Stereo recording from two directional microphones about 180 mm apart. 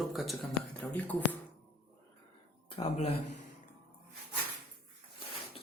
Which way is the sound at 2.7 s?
35° left (ahead or behind).